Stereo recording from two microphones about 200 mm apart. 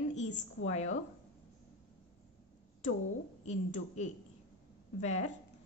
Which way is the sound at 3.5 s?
35° left (ahead or behind).